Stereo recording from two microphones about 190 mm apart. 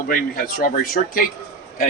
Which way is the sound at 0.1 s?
50° left (ahead or behind).